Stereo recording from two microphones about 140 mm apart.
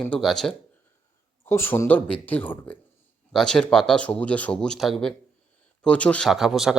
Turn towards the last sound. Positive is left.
turn(degrees=-5)  # may be behind; listen again after turning